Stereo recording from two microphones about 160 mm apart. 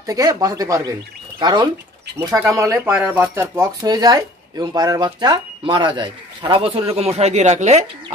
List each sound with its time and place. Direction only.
0.0 s speech: 20° right (ahead or behind); by 7.8 s 45° right (ahead or behind)